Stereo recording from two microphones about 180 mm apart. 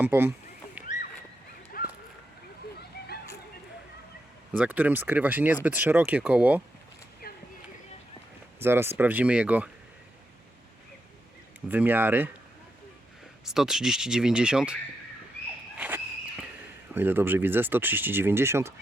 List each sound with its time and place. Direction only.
0.0 s speech: 15° right (ahead or behind)
1.7 s a sound: 55° left (ahead or behind)
4.5 s speech: 10° right (ahead or behind)
8.5 s speech: 15° right (ahead or behind)
11.7 s speech: 10° right (ahead or behind)
13.4 s speech: 5° right (ahead or behind)
16.9 s speech: 10° right (ahead or behind)